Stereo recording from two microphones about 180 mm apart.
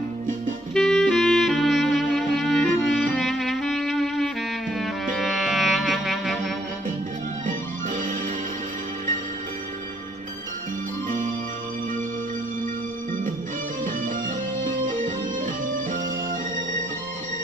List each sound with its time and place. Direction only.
0.7 s music: centre (ahead or behind)
7.4 s music: 45° right (ahead or behind)
11.1 s music: 45° right (ahead or behind)
14.6 s music: 45° right (ahead or behind)